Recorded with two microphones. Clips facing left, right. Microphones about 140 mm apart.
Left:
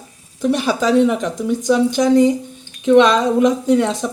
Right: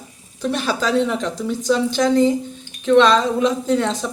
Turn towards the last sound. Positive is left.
turn(degrees=15)  # may be behind; listen again after turning